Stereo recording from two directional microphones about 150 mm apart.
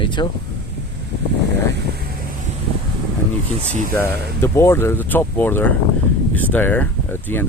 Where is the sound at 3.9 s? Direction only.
15° left (ahead or behind).